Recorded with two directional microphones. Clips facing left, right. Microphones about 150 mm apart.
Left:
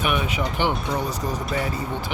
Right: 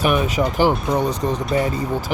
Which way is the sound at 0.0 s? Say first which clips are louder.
Right 6 dB; 35° right (ahead or behind).